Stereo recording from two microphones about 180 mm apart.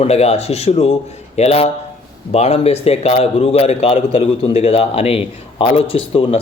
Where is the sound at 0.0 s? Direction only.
35° left (ahead or behind).